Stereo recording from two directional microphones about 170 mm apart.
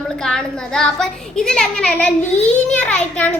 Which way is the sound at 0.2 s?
5° left (ahead or behind).